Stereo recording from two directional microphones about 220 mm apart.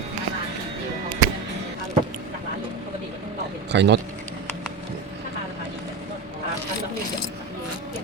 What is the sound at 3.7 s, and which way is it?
Speech, 50° right (ahead or behind).